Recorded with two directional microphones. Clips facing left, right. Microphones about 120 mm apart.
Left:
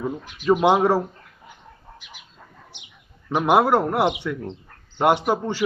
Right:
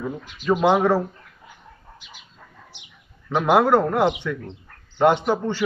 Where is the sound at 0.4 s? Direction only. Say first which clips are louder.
Left 1 dB; 10° left (ahead or behind).